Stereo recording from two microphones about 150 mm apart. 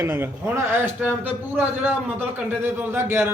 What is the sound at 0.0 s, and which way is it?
A man's voice, 15° right (ahead or behind).